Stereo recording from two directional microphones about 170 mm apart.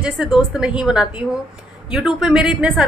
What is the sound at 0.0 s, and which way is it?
A woman's voice, 5° right (ahead or behind).